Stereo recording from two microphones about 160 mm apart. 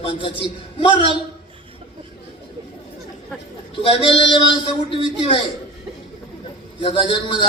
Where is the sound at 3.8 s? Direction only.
35° left (ahead or behind).